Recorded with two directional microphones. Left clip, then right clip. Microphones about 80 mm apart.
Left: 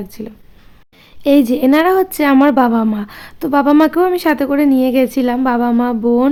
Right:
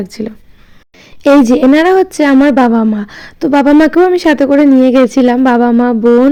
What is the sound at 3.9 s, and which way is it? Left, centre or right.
Speech, right.